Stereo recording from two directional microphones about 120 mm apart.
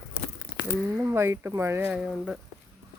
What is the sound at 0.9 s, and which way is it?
Speech, 20° right (ahead or behind).